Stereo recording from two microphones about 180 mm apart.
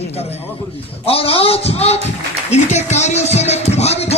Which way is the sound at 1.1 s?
30° left (ahead or behind).